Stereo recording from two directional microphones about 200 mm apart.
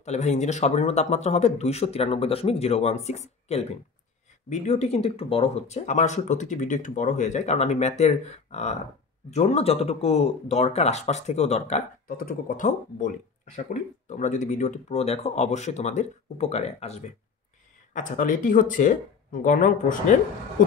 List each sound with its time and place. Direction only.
0.0 s speech: 35° left (ahead or behind)